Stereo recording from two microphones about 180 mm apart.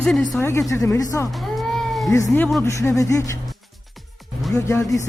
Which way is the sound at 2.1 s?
15° left (ahead or behind).